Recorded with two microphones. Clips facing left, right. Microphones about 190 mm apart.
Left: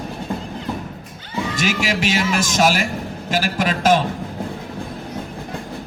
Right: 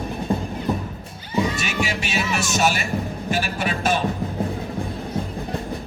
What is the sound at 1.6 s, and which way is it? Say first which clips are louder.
A man's voice: left 4 dB; 90° left.